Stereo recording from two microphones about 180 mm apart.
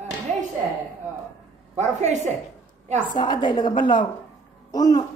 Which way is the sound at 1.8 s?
40° right (ahead or behind).